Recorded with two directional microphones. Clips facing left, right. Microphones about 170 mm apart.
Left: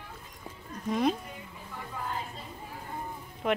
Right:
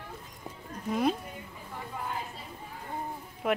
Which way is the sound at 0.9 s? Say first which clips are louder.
Left 1 dB; 10° right (ahead or behind).